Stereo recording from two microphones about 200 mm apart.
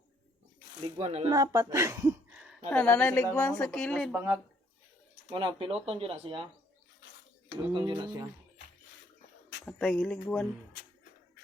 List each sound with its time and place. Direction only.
0.9 s speech: 30° right (ahead or behind)
1.3 s speech: 15° right (ahead or behind)
2.6 s a woman's voice: 10° left (ahead or behind)
3.5 s a sound: 5° left (ahead or behind)
4.1 s speech: 10° right (ahead or behind)
5.3 s speech: 25° right (ahead or behind)
7.7 s speech: 25° right (ahead or behind)
9.6 s a sound: 5° left (ahead or behind)